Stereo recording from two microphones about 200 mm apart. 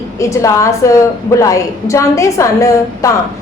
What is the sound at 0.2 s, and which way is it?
A woman's voice, 15° left (ahead or behind).